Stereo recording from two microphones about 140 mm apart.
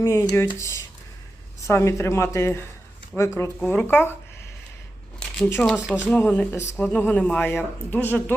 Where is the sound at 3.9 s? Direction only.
15° left (ahead or behind).